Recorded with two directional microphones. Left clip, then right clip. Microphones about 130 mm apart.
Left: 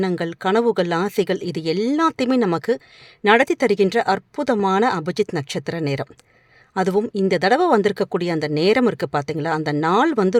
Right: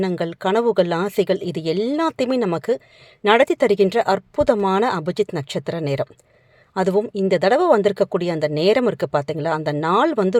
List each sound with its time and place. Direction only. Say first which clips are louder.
0.0 s speech: even; 15° left (ahead or behind)